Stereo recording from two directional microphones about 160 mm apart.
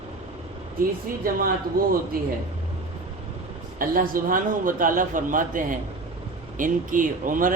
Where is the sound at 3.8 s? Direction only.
60° right (ahead or behind).